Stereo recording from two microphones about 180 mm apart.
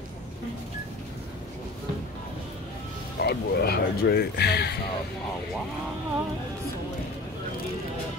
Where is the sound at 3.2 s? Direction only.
60° left (ahead or behind).